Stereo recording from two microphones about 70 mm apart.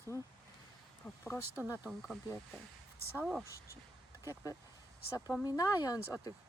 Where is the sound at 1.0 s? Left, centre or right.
Left.